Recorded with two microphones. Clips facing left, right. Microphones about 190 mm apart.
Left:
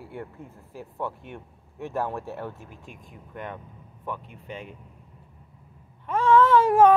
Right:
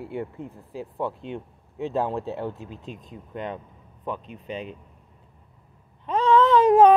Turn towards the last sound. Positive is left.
turn(degrees=-20)  # may be behind; listen again after turning